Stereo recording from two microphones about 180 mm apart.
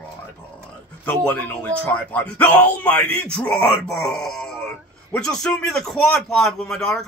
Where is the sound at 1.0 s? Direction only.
10° left (ahead or behind).